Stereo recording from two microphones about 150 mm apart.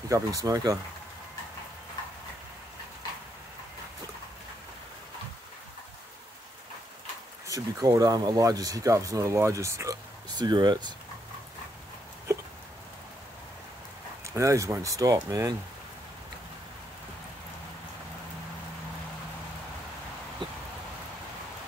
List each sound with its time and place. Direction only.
0.1 s speech: 20° right (ahead or behind)
7.4 s speech: 20° right (ahead or behind)
14.2 s speech: 20° right (ahead or behind)
20.4 s a sound: 30° right (ahead or behind)